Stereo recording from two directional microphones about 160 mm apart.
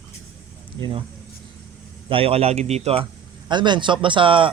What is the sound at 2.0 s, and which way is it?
Speech, 35° right (ahead or behind).